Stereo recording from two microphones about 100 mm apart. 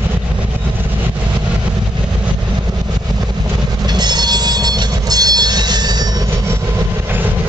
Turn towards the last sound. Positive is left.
turn(degrees=-45)  # may be behind; listen again after turning